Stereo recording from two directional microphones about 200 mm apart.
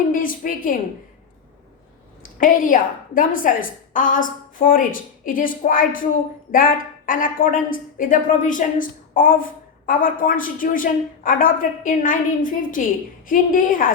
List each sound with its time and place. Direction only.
0.1 s a woman's voice: 45° left (ahead or behind)
2.4 s a woman's voice: 45° left (ahead or behind)